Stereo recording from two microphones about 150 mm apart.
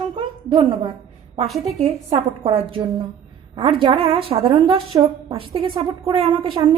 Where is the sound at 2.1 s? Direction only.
35° right (ahead or behind).